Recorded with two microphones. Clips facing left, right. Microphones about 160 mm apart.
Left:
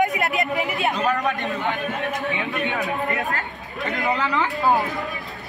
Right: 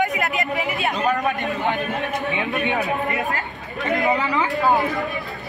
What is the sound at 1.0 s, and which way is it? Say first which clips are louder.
A man's voice: right 1 dB; 20° right (ahead or behind).